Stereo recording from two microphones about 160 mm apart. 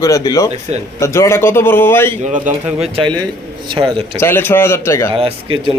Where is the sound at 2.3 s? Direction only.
50° right (ahead or behind).